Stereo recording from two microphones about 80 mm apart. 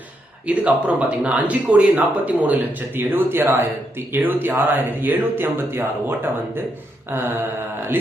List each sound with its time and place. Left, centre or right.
0.4 s speech: centre